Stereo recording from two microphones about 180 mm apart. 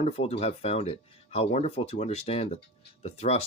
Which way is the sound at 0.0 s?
35° left (ahead or behind).